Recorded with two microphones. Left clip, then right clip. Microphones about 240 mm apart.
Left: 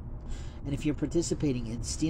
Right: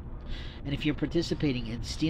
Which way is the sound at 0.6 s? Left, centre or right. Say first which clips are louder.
Right 1 dB; centre.